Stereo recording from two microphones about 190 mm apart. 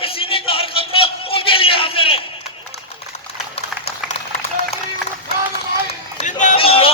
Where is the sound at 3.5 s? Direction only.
30° left (ahead or behind).